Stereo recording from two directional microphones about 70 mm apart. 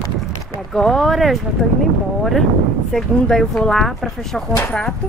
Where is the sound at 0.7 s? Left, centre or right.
Centre.